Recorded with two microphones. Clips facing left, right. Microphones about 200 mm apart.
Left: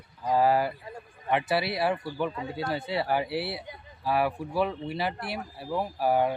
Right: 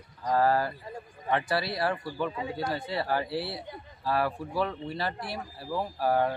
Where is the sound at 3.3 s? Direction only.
65° left (ahead or behind).